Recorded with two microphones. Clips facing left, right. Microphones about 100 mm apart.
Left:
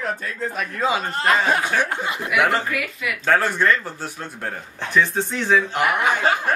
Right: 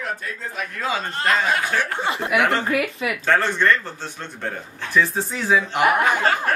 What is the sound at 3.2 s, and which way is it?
Speech, 5° left (ahead or behind).